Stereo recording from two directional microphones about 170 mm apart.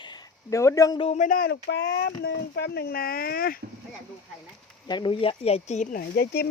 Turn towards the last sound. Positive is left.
turn(degrees=65)  # may be behind; listen again after turning